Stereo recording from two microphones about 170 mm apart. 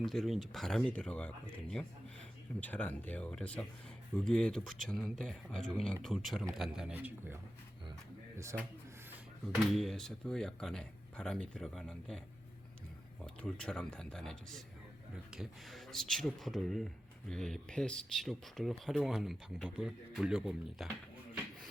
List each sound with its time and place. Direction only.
0.0 s speech: centre (ahead or behind)
8.5 s speech: 15° right (ahead or behind)
9.7 s speech: centre (ahead or behind)
13.2 s speech: 5° left (ahead or behind)